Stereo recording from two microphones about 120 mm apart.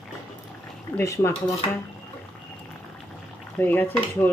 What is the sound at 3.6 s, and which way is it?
Stir, 15° left (ahead or behind).